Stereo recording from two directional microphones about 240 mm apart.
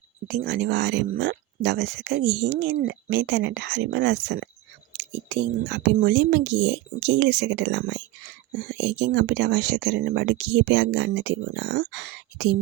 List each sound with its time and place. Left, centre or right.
0.3 s speech: right